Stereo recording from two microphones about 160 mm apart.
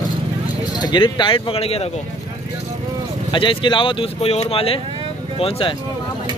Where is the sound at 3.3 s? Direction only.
30° left (ahead or behind).